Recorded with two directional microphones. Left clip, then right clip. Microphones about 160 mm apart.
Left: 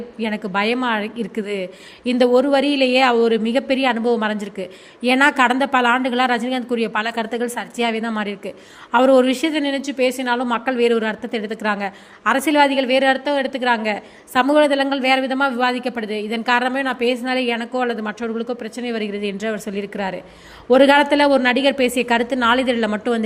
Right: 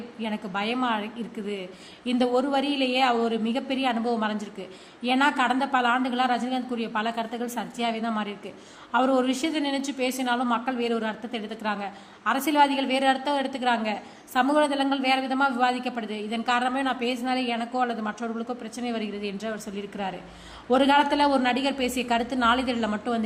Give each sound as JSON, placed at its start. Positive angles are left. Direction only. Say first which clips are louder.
{"t": 0.2, "sound": "a woman's voice", "louder": "left 9 dB", "side_deg": 30}